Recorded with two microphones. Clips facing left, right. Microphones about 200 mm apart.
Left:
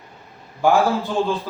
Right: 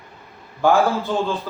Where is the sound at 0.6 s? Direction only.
15° left (ahead or behind).